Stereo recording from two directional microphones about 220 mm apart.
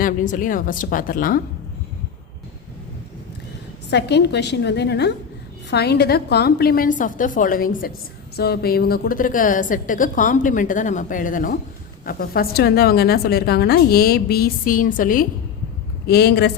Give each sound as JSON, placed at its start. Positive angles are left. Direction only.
{"t": 0.0, "sound": "a woman's voice", "side_deg": 40}
{"t": 3.8, "sound": "a woman's voice", "side_deg": 50}